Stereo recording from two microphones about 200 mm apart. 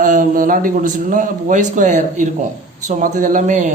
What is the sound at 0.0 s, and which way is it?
A man's voice, 40° right (ahead or behind).